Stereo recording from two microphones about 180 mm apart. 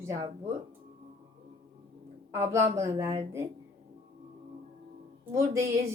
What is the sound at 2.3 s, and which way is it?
A woman's voice, 15° right (ahead or behind).